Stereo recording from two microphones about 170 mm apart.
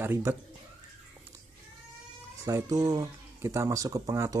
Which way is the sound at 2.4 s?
20° right (ahead or behind).